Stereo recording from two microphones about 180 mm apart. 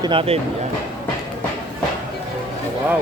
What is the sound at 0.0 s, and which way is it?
Speech, 30° right (ahead or behind).